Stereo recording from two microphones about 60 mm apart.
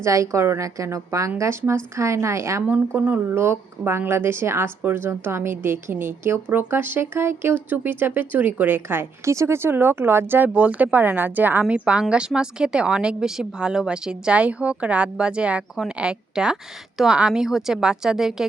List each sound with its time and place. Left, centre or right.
0.0 s speech: right
0.9 s a woman's voice: right
1.4 s a woman's voice: right
2.9 s speech: right
11.7 s a woman's voice: centre